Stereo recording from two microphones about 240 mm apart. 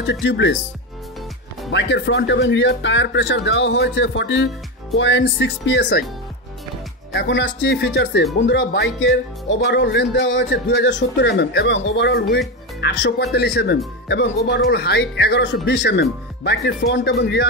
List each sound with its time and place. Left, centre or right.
0.0 s speech: left
1.7 s speech: left
7.2 s speech: left